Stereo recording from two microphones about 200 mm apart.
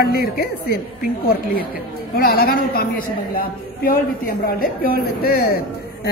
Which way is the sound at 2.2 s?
50° left (ahead or behind).